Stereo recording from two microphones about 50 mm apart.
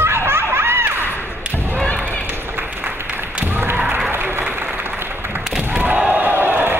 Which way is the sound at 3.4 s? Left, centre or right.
Right.